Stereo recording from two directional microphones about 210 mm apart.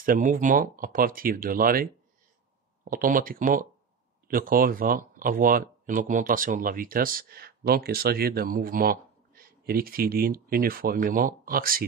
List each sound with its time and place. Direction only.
0.0 s speech: 40° right (ahead or behind)